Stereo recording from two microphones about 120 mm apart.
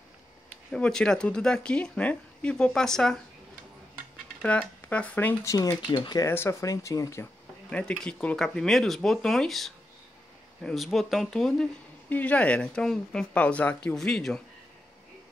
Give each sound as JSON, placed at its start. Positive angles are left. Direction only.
{"t": 0.7, "sound": "a woman's voice", "side_deg": 5}
{"t": 4.4, "sound": "a woman's voice", "side_deg": 10}
{"t": 5.5, "sound": "speech", "side_deg": 30}
{"t": 5.8, "sound": "speech", "side_deg": 40}
{"t": 6.3, "sound": "speech", "side_deg": 20}
{"t": 7.7, "sound": "speech", "side_deg": 10}